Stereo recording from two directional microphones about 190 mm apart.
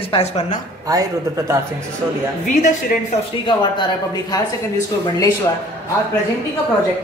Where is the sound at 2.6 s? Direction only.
40° left (ahead or behind).